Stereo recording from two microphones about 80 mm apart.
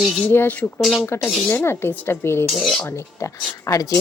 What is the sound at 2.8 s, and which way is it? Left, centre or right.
Speech, left.